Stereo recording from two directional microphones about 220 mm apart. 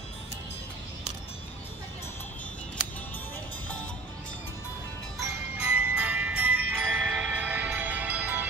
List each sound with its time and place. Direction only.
5.6 s jingle bell: 5° right (ahead or behind)